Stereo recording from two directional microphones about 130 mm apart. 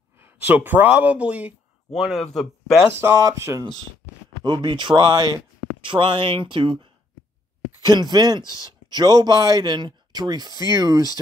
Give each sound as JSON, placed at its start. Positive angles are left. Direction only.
{"t": 0.5, "sound": "speech", "side_deg": -15}
{"t": 3.0, "sound": "speech", "side_deg": -20}
{"t": 4.5, "sound": "speech", "side_deg": -35}